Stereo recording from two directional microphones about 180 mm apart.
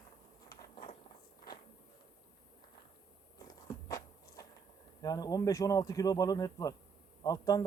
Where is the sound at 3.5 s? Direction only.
20° left (ahead or behind).